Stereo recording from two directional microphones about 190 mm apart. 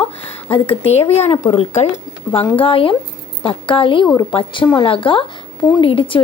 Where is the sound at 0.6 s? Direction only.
30° left (ahead or behind).